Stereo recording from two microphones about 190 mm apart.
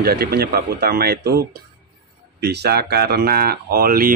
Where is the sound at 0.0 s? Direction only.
55° right (ahead or behind).